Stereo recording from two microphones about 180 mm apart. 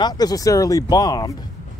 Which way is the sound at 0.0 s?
20° left (ahead or behind).